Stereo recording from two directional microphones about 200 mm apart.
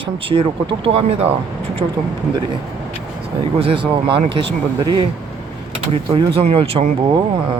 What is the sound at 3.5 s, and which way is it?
Speech, 25° right (ahead or behind).